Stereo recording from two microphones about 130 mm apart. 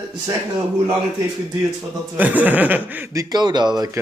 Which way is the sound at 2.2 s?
10° right (ahead or behind).